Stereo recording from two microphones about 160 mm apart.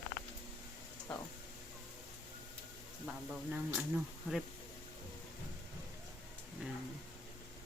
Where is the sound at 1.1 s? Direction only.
5° left (ahead or behind).